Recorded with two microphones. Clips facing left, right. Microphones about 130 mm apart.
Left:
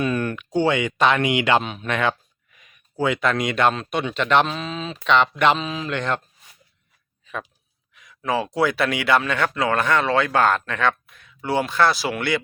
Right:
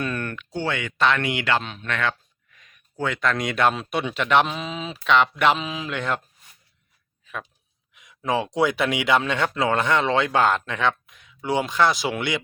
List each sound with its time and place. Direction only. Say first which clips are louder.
0.0 s speech: left 5 dB; 10° left (ahead or behind); by 6.2 s 5° right (ahead or behind)
7.9 s a man's voice: even; 20° right (ahead or behind)